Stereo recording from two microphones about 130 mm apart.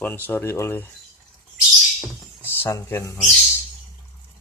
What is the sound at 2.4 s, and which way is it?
Speech, 15° left (ahead or behind).